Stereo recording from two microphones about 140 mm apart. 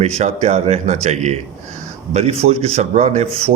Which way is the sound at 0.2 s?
50° right (ahead or behind).